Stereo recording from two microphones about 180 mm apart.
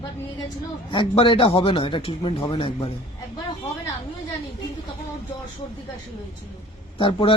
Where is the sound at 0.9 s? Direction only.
25° left (ahead or behind).